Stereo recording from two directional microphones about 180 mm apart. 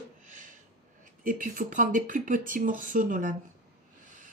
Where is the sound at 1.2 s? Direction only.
50° right (ahead or behind).